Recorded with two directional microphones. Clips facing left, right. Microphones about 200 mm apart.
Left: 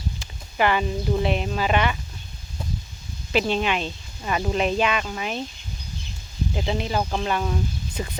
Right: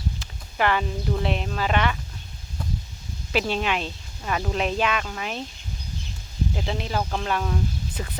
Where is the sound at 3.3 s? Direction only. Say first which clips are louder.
Left 2 dB; 5° right (ahead or behind).